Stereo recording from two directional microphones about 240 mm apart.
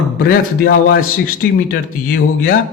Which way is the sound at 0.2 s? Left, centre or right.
Left.